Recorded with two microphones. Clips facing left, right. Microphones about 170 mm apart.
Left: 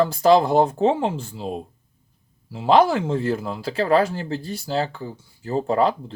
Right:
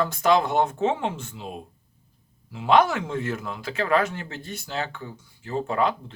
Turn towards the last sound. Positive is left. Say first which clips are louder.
# left 4 dB
turn(degrees=35)  # may be behind; listen again after turning